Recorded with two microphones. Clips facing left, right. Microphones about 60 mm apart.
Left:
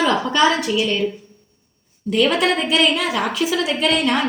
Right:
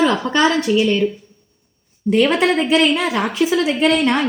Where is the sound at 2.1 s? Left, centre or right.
Right.